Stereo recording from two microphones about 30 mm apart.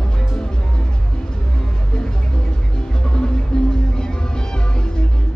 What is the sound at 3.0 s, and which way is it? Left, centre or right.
Music, left.